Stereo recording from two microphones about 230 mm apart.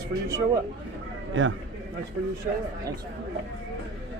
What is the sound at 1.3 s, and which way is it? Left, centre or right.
Speech, right.